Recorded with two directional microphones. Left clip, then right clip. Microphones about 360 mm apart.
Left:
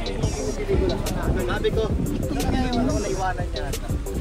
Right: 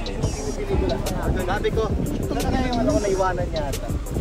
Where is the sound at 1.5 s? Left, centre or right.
Centre.